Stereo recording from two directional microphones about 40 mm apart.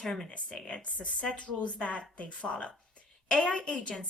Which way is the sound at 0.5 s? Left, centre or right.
Left.